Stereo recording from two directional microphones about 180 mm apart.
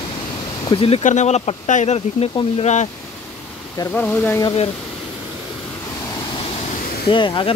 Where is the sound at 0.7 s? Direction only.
30° left (ahead or behind).